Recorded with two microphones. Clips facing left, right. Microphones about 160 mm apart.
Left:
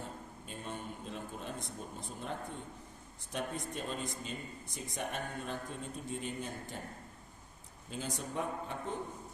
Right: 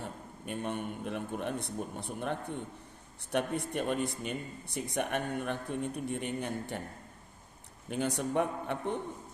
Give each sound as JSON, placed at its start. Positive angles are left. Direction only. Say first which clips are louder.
{"t": 0.0, "sound": "a man's voice", "louder": "right 3 dB", "side_deg": -65}
{"t": 7.9, "sound": "speech", "louder": "right 8 dB", "side_deg": -65}